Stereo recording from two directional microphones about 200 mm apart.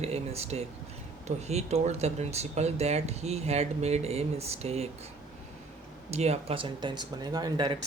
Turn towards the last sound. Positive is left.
turn(degrees=-20)  # may be behind; listen again after turning